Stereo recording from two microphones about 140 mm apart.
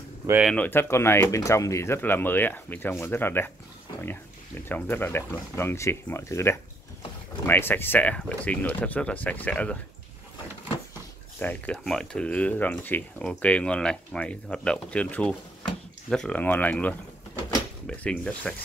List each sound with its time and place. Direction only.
0.6 s speech: 15° left (ahead or behind)
4.6 s speech: 15° left (ahead or behind)
11.3 s speech: 10° left (ahead or behind)